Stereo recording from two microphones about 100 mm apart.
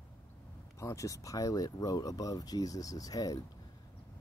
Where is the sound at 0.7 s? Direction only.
30° left (ahead or behind).